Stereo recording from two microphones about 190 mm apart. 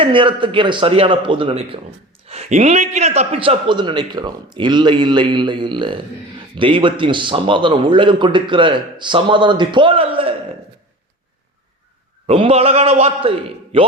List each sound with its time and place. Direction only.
0.0 s a man's voice: 25° right (ahead or behind)
12.3 s a man's voice: 30° right (ahead or behind)